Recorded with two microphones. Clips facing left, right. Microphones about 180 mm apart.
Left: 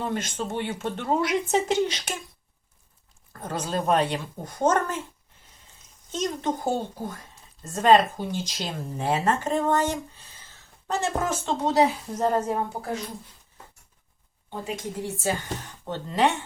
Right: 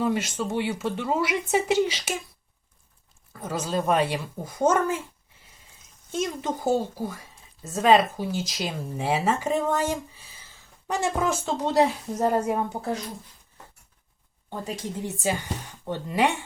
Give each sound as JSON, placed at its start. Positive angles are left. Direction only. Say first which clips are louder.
{"t": 0.0, "sound": "speech", "louder": "right 4 dB", "side_deg": -10}
{"t": 3.3, "sound": "speech", "louder": "right 1 dB", "side_deg": -5}
{"t": 6.1, "sound": "a woman's voice", "louder": "left 1 dB", "side_deg": -10}
{"t": 12.7, "sound": "speech", "louder": "right 3 dB", "side_deg": -25}
{"t": 15.0, "sound": "speech", "louder": "right 1 dB", "side_deg": -15}